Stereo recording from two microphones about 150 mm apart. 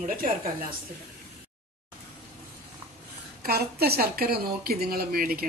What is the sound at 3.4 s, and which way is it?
A woman's voice, 90° right.